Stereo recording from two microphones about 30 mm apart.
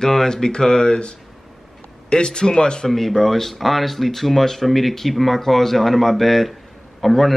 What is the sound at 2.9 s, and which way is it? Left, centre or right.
Speech, centre.